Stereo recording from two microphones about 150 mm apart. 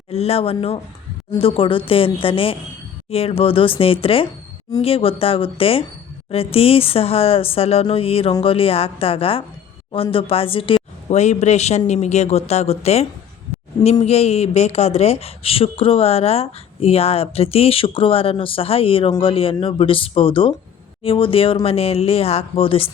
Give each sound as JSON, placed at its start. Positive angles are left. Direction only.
{"t": 0.1, "sound": "a woman's voice", "side_deg": 45}
{"t": 11.1, "sound": "a woman's voice", "side_deg": 50}